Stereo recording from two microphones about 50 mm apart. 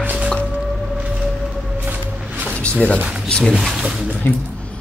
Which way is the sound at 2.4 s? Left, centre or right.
Left.